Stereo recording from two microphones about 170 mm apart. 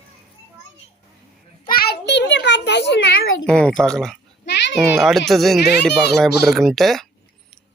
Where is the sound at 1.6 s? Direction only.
65° left (ahead or behind); by 3.3 s 80° left.